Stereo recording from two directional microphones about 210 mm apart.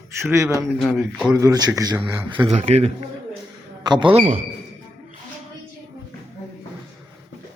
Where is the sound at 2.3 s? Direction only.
25° right (ahead or behind).